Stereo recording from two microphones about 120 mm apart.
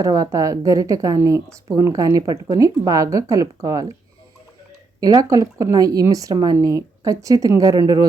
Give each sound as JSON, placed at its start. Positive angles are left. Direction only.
{"t": 0.0, "sound": "speech", "side_deg": -30}
{"t": 4.9, "sound": "speech", "side_deg": -30}